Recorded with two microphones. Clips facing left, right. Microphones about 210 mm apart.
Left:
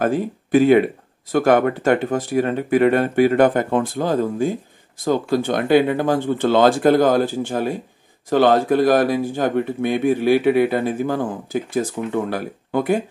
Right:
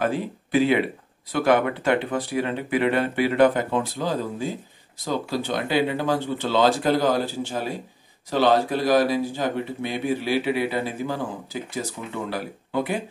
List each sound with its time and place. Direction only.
0.0 s speech: 50° left (ahead or behind)